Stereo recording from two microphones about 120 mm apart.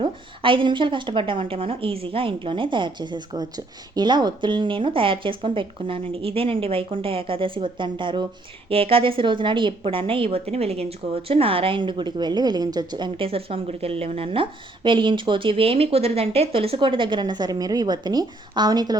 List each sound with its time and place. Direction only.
0.0 s a woman's voice: 45° right (ahead or behind)